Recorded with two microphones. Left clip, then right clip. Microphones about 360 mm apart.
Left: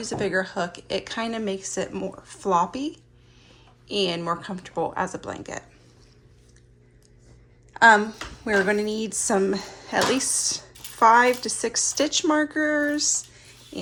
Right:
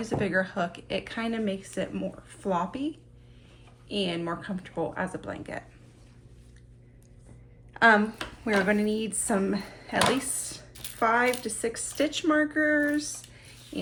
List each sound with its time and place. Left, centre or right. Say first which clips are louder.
0.0 s a woman's voice: left 2 dB; centre
7.7 s a woman's voice: left 5 dB; centre